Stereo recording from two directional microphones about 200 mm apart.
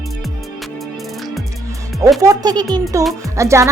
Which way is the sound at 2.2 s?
20° right (ahead or behind).